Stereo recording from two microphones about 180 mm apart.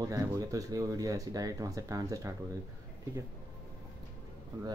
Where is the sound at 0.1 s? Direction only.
20° right (ahead or behind).